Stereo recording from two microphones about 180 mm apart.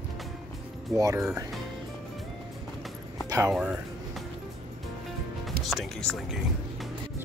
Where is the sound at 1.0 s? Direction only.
15° right (ahead or behind).